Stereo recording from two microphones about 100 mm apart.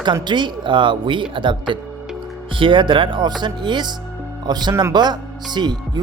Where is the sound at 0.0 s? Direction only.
50° right (ahead or behind).